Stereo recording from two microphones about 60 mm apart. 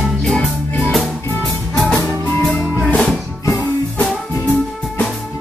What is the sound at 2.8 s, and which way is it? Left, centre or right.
Music, centre.